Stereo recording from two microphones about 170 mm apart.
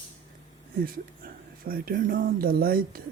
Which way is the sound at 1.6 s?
60° right (ahead or behind).